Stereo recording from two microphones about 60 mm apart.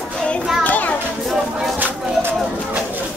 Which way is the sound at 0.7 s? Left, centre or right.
Left.